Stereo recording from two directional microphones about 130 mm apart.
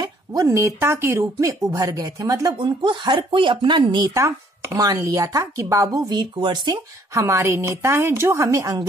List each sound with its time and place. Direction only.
0.0 s speech: 30° right (ahead or behind)
7.2 s speech: 20° right (ahead or behind)